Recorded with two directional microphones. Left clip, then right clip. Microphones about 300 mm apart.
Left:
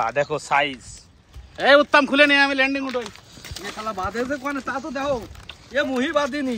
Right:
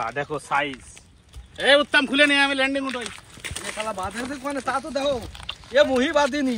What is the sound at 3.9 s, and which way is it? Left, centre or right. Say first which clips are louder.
Speech: left 4 dB; centre.